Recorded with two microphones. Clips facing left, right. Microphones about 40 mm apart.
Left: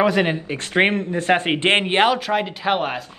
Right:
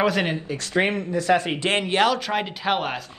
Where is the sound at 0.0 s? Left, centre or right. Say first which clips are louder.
Left 4 dB; centre.